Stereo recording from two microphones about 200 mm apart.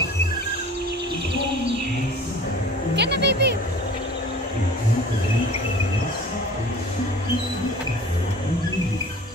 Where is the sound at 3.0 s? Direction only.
55° right (ahead or behind).